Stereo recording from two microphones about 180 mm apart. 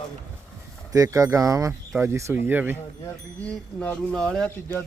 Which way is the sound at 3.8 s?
5° left (ahead or behind).